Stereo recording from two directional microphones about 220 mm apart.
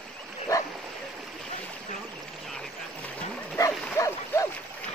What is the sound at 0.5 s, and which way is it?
Bow-wow, 15° left (ahead or behind).